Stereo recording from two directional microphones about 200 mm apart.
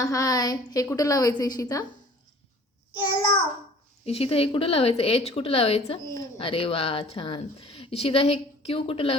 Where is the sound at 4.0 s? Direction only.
30° left (ahead or behind).